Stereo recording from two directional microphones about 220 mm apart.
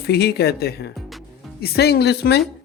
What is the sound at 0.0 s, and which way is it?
Speech, 45° left (ahead or behind).